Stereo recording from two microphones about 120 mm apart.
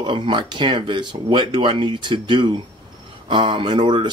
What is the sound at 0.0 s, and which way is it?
Speech, 40° right (ahead or behind).